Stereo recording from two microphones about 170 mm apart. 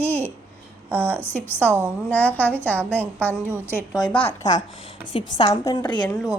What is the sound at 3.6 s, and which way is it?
Speech, 15° left (ahead or behind).